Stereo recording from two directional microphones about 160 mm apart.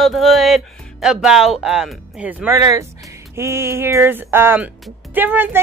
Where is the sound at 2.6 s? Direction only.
20° right (ahead or behind).